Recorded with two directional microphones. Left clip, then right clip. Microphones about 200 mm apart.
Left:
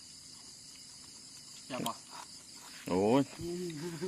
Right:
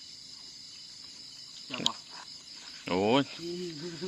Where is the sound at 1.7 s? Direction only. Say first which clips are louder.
Right 6 dB; 5° left (ahead or behind).